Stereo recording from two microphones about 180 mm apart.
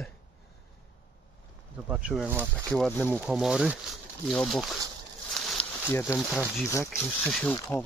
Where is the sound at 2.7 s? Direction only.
10° left (ahead or behind).